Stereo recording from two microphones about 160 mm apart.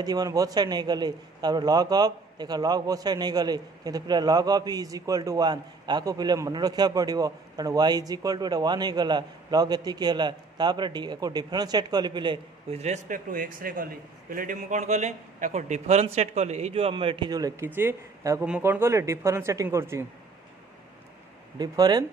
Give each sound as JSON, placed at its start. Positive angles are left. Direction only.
{"t": 0.0, "sound": "a man's voice", "side_deg": -25}
{"t": 21.5, "sound": "a man's voice", "side_deg": -25}